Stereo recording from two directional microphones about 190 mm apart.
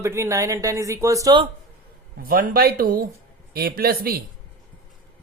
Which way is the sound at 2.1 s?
50° right (ahead or behind).